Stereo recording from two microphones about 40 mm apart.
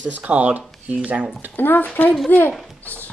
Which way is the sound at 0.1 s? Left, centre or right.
Right.